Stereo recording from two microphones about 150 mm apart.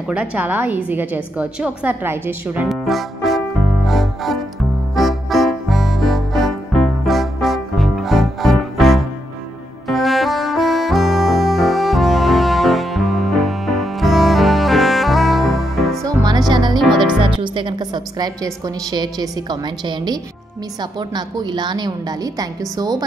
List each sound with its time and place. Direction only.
0.1 s a woman's voice: 10° right (ahead or behind)
2.7 s music: centre (ahead or behind)
16.0 s music: 25° right (ahead or behind)
17.4 s a woman's voice: 30° right (ahead or behind)